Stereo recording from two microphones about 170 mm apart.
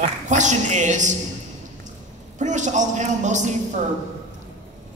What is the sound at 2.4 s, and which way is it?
Speech, 45° right (ahead or behind).